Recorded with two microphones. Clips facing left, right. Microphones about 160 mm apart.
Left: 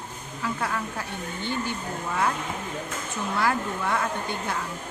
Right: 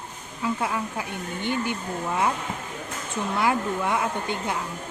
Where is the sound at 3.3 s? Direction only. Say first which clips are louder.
Right 2 dB; 15° right (ahead or behind).